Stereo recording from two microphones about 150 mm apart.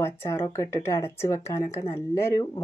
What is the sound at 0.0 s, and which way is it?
Speech, 15° left (ahead or behind).